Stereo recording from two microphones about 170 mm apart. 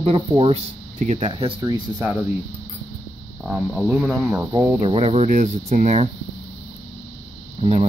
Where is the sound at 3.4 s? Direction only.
5° right (ahead or behind).